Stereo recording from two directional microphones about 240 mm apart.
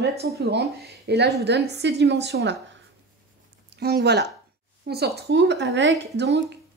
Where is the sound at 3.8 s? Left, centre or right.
Right.